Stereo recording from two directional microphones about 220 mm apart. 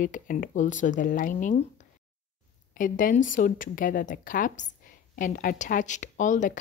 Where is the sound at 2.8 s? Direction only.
40° left (ahead or behind).